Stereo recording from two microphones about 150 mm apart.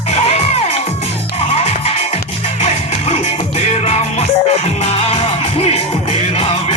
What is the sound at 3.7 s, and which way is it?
Music, 45° left (ahead or behind).